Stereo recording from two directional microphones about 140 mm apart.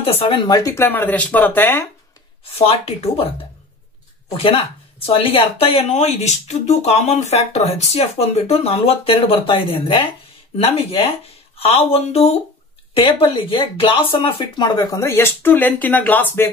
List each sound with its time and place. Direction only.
0.0 s speech: 45° left (ahead or behind); by 1.9 s 15° left (ahead or behind)
2.5 s speech: 45° left (ahead or behind)
4.3 s speech: 40° left (ahead or behind); by 16.4 s 15° left (ahead or behind)